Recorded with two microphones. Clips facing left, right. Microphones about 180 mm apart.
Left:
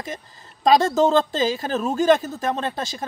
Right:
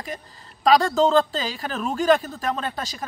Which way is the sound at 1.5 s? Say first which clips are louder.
Left 4 dB; 25° left (ahead or behind).